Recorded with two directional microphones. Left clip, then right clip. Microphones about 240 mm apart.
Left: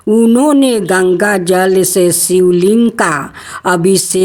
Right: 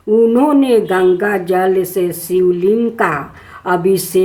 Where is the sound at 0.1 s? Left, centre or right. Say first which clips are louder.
Left 1 dB; left.